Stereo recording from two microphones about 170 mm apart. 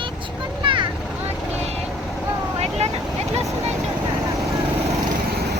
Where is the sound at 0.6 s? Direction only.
30° right (ahead or behind).